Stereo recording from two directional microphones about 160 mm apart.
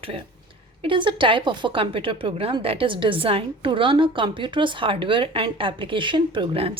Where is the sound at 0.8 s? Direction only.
30° right (ahead or behind).